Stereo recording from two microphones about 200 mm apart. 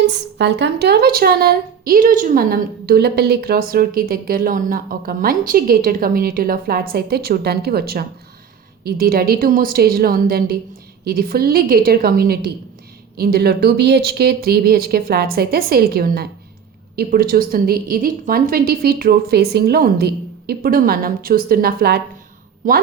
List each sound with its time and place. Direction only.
0.0 s a woman's voice: 60° right (ahead or behind)